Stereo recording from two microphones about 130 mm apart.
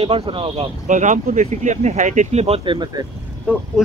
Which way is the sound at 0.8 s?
75° right (ahead or behind).